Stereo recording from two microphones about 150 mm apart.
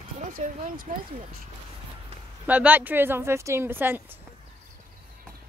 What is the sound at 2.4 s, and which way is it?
Speech, 10° right (ahead or behind).